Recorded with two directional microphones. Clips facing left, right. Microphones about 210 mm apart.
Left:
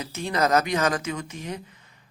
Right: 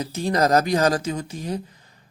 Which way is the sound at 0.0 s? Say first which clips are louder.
Right 4 dB; 35° right (ahead or behind).